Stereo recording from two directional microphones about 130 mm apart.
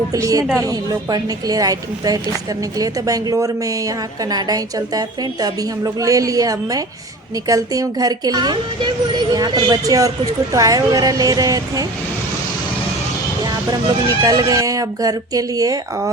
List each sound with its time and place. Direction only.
0.1 s a woman's voice: 25° right (ahead or behind)
14.2 s a woman's voice: 30° right (ahead or behind)